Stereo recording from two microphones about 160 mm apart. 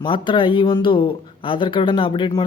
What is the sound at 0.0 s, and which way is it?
Speech, 30° left (ahead or behind).